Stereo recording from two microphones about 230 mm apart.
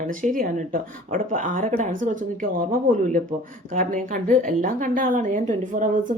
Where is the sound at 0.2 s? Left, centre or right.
Right.